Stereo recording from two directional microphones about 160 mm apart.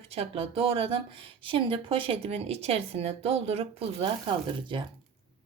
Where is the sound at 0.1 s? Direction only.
40° right (ahead or behind).